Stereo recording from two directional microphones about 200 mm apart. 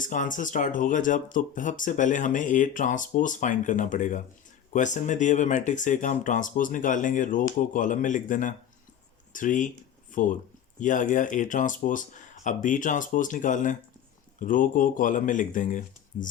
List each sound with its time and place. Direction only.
0.0 s speech: 40° left (ahead or behind)